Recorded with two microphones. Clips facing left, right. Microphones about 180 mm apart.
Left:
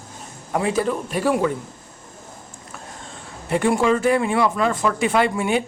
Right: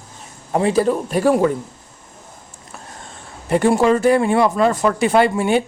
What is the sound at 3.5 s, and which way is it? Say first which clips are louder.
A man's voice: right 4 dB; 40° right (ahead or behind).